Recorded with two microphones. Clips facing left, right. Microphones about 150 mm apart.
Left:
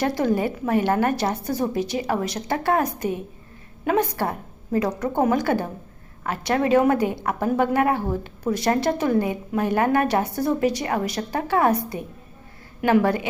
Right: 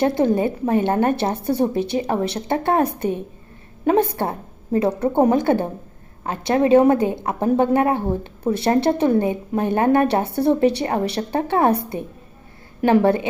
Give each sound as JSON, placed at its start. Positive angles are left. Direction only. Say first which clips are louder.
{"t": 0.0, "sound": "a woman's voice", "louder": "right 4 dB", "side_deg": -25}
{"t": 12.8, "sound": "a woman's voice", "louder": "right 3 dB", "side_deg": -25}